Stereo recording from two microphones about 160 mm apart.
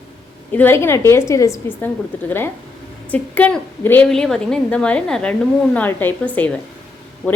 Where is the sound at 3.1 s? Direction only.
10° left (ahead or behind).